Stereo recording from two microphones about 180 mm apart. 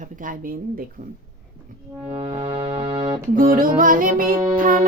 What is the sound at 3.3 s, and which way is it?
A woman's voice, 50° right (ahead or behind).